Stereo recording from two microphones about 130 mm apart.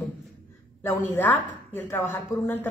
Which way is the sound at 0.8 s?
20° left (ahead or behind).